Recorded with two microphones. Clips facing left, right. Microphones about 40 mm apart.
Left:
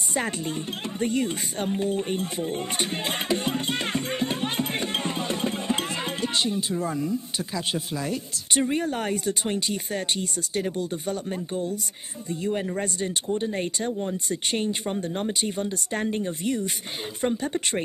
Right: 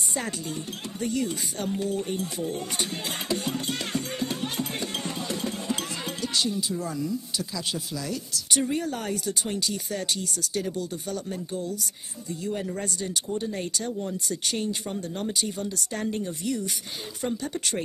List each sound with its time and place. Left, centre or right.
0.9 s speech: left